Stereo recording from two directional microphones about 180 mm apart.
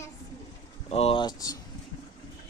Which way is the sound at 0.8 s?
35° left (ahead or behind).